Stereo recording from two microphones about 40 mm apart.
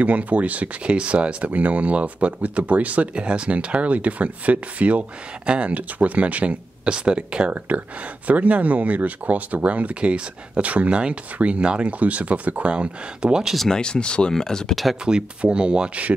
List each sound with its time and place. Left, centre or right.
0.0 s speech: right
0.8 s speech: right
6.8 s speech: right
7.5 s speech: right
10.9 s speech: right
12.0 s speech: right
12.7 s speech: right
13.7 s speech: left
15.5 s speech: right